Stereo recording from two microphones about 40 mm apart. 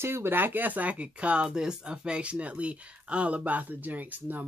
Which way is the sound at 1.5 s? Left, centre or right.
Centre.